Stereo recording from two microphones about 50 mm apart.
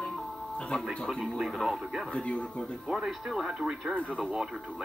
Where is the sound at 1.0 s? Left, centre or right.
Centre.